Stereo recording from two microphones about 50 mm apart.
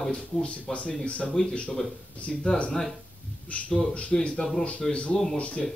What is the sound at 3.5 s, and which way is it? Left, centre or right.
Speech, left.